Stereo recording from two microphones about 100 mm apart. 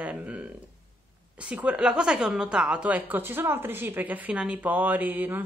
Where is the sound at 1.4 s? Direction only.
15° right (ahead or behind).